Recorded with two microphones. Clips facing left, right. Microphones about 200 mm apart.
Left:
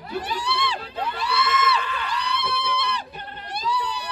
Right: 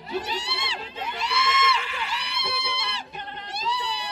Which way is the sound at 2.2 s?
25° right (ahead or behind).